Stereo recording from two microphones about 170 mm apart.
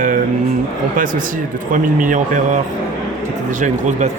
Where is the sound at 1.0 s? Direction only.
50° right (ahead or behind).